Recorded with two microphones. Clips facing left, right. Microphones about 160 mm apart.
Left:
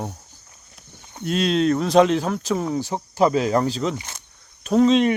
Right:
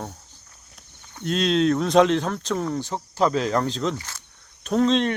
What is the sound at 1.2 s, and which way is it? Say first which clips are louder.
Speech: left 1 dB; 5° left (ahead or behind).